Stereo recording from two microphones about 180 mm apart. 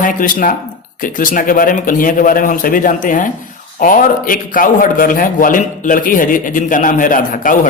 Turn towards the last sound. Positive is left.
turn(degrees=50)  # may be behind; listen again after turning